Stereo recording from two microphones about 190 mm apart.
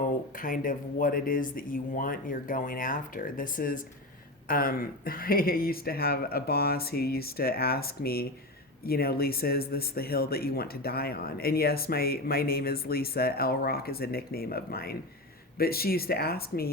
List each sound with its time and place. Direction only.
0.3 s speech: 45° left (ahead or behind)